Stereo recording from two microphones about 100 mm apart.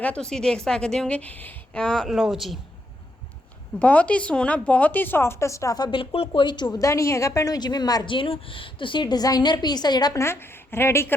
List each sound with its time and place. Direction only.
0.0 s a woman's voice: 10° left (ahead or behind)
3.8 s speech: 15° left (ahead or behind); by 6.7 s 50° left (ahead or behind)
6.7 s a woman's voice: 30° left (ahead or behind)
8.0 s a woman's voice: 60° left (ahead or behind)
10.2 s speech: 25° left (ahead or behind)